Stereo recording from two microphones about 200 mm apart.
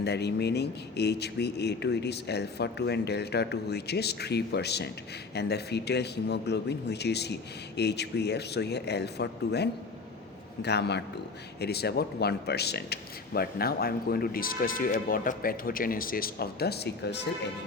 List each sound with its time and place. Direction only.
0.0 s speech: 55° left (ahead or behind)